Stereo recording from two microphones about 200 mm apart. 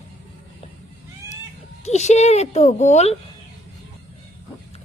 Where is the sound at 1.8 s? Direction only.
35° left (ahead or behind).